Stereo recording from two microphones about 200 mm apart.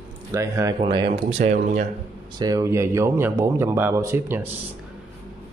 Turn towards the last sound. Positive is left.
turn(degrees=-10)  # may be behind; listen again after turning